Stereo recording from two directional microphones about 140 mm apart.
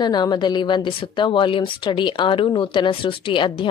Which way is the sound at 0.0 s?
30° left (ahead or behind).